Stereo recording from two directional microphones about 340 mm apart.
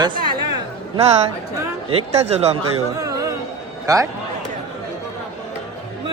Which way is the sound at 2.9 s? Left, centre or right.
Centre.